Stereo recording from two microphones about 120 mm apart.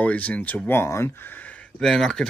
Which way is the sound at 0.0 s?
10° left (ahead or behind).